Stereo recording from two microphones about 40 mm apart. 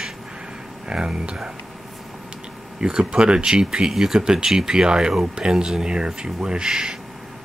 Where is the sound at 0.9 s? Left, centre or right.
Right.